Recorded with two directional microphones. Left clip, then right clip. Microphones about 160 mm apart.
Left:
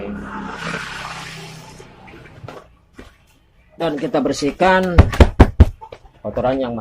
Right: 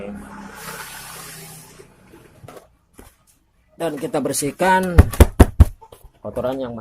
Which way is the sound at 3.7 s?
65° right (ahead or behind).